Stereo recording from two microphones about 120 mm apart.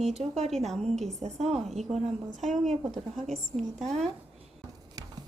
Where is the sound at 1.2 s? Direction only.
65° right (ahead or behind).